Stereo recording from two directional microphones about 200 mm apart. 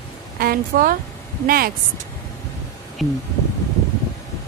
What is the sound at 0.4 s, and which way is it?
Speech, 45° right (ahead or behind).